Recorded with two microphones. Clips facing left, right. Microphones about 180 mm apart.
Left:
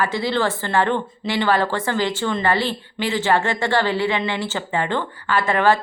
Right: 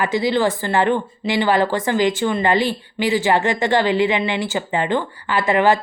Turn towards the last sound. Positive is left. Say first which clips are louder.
# right 2 dB
turn(degrees=-15)  # may be behind; listen again after turning